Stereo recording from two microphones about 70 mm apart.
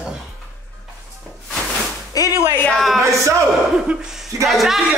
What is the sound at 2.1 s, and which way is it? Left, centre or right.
Music, left.